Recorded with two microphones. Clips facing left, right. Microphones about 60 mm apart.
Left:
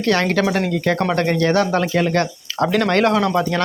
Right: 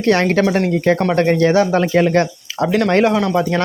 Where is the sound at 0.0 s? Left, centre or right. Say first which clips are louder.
Right 3 dB; right.